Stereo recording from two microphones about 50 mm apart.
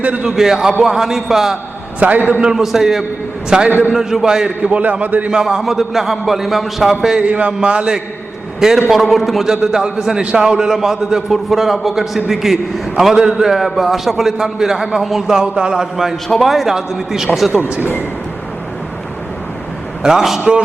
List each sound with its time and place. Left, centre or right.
0.0 s a man's voice: right
0.3 s a man's voice: centre
2.0 s a man's voice: right
2.4 s a man's voice: centre
3.7 s a man's voice: right
3.9 s a man's voice: centre
4.6 s a man's voice: right
5.3 s a man's voice: centre
7.2 s a man's voice: right
8.9 s a man's voice: centre
9.5 s a man's voice: centre
15.4 s a man's voice: centre
20.0 s a man's voice: centre